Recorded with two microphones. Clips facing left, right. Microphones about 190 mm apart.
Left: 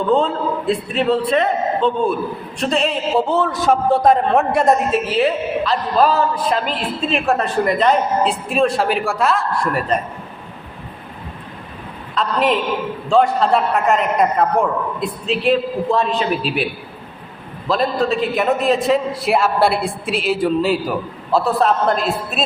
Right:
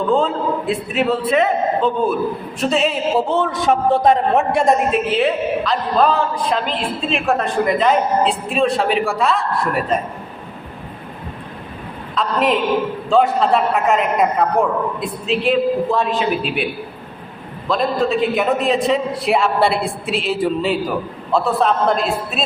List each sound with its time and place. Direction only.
0.7 s a man's voice: 5° right (ahead or behind)
12.1 s a man's voice: centre (ahead or behind)
17.7 s a man's voice: centre (ahead or behind)